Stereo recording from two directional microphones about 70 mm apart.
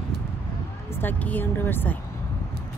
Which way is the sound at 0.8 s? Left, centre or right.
Left.